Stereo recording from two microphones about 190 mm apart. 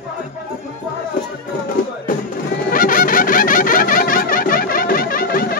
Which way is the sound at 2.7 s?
45° left (ahead or behind).